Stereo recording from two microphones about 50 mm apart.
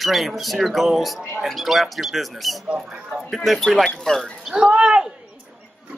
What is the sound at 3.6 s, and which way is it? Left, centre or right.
Speech, centre.